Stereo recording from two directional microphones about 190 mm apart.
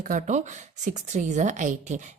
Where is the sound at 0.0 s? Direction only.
45° right (ahead or behind).